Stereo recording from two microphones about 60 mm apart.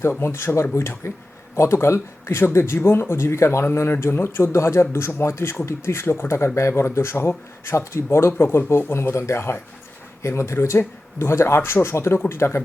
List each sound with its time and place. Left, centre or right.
0.2 s speech: left